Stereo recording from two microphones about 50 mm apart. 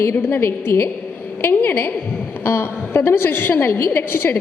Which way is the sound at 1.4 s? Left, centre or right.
Left.